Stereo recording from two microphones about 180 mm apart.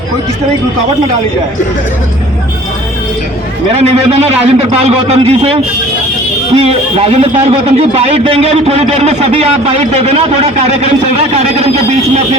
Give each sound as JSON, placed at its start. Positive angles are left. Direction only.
{"t": 3.7, "sound": "a man's voice", "side_deg": -35}